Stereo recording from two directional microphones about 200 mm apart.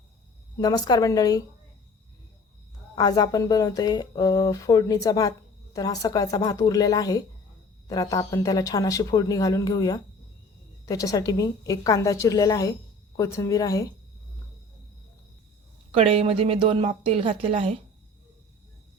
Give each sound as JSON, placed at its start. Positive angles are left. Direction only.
{"t": 0.6, "sound": "speech", "side_deg": 20}
{"t": 2.9, "sound": "speech", "side_deg": 20}
{"t": 15.9, "sound": "a woman's voice", "side_deg": -30}